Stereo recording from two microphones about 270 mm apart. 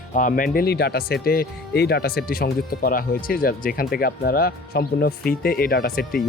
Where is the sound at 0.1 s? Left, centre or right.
Left.